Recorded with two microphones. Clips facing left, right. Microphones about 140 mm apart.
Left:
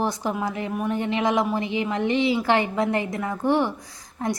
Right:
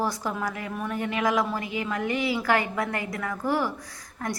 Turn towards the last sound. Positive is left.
turn(degrees=25)  # may be behind; listen again after turning